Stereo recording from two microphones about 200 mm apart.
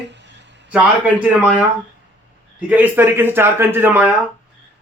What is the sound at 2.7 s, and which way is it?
A man's voice, 10° right (ahead or behind).